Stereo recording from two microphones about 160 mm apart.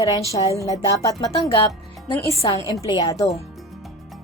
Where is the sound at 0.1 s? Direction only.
20° left (ahead or behind).